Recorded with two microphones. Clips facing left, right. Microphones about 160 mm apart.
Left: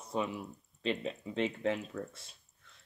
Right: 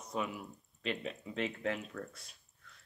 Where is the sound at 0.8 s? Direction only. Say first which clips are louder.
Left 4 dB; 30° left (ahead or behind).